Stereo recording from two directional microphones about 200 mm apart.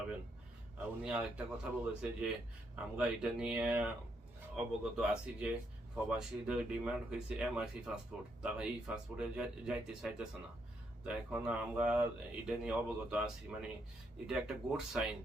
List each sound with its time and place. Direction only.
0.8 s speech: 5° right (ahead or behind)